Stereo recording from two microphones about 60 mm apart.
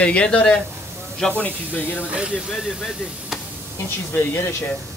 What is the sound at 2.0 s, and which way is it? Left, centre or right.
Speech, right.